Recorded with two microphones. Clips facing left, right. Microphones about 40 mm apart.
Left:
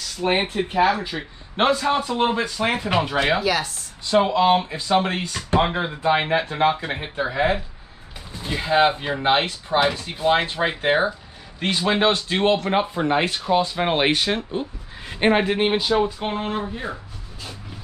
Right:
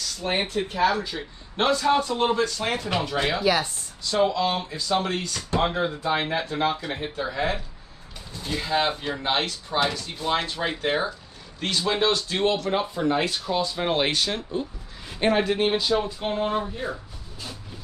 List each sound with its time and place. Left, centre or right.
0.2 s speech: left